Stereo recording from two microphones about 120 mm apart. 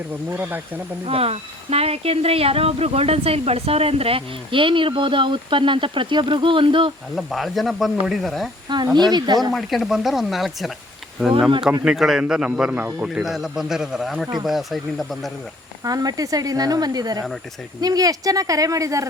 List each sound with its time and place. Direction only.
0.3 s speech: 15° right (ahead or behind)
1.0 s speech: 55° right (ahead or behind)
7.2 s a man's voice: centre (ahead or behind)
8.7 s speech: 35° right (ahead or behind)
9.5 s a man's voice: centre (ahead or behind)
15.8 s speech: 30° right (ahead or behind)